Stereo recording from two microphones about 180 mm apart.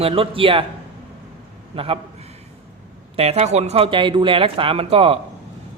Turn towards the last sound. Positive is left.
turn(degrees=-30)  # may be behind; listen again after turning